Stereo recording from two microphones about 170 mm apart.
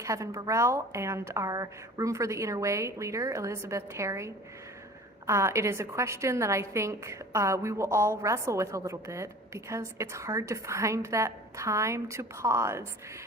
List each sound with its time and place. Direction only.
0.0 s a woman's voice: 20° right (ahead or behind)